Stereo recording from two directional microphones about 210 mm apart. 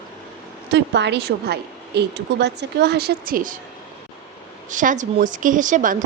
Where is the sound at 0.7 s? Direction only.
55° right (ahead or behind).